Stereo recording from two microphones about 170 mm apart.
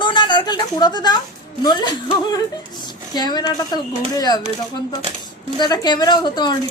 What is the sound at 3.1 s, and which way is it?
A woman's voice, 25° left (ahead or behind).